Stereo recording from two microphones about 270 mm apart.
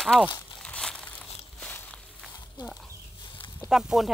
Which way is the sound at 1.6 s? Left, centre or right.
Centre.